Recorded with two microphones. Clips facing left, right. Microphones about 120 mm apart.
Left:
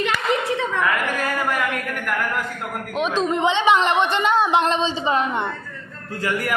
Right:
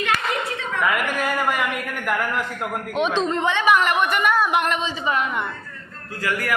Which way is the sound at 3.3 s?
20° left (ahead or behind).